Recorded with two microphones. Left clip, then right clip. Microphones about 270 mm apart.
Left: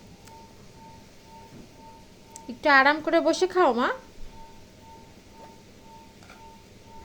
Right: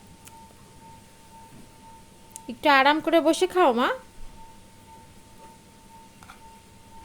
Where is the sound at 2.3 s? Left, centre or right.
Right.